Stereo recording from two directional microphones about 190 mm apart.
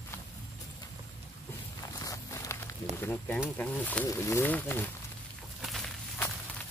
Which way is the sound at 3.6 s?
10° left (ahead or behind).